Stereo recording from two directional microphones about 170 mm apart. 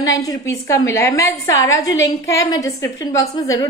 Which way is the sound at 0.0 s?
20° left (ahead or behind).